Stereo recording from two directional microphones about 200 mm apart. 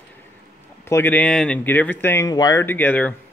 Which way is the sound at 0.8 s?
10° left (ahead or behind).